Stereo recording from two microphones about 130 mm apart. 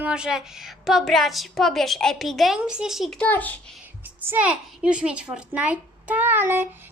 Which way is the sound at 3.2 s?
15° left (ahead or behind).